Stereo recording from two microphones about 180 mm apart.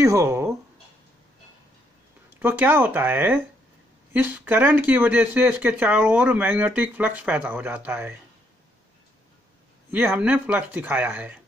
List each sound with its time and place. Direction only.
0.0 s speech: 15° right (ahead or behind)
2.4 s speech: 10° right (ahead or behind)
9.8 s speech: 10° right (ahead or behind)